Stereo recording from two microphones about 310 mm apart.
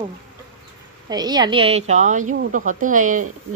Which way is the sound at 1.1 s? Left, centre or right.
Centre.